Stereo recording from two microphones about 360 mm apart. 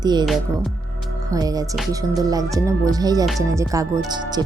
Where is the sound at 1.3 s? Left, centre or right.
Centre.